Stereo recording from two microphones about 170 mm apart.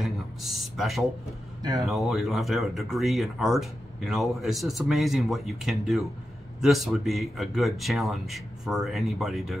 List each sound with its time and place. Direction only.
0.0 s a sound: centre (ahead or behind)
1.6 s speech: 20° right (ahead or behind)
1.9 s speech: centre (ahead or behind)